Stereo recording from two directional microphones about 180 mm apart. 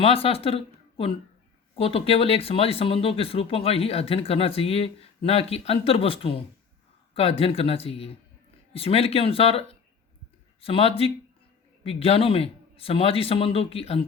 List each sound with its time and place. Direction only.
0.0 s speech: 30° left (ahead or behind)